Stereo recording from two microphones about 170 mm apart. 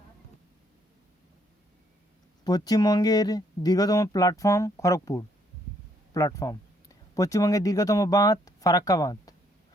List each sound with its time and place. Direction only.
2.4 s speech: 25° left (ahead or behind)